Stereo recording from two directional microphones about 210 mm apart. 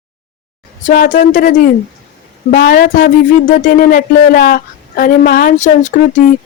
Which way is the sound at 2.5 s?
40° left (ahead or behind).